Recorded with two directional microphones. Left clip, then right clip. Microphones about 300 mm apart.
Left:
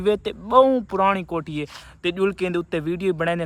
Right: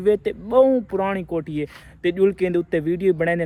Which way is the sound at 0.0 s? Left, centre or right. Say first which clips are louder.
Right 2 dB; centre.